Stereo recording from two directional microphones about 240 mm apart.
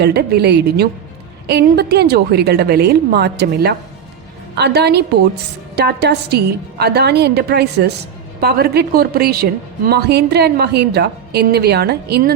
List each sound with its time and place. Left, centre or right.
0.0 s a woman's voice: right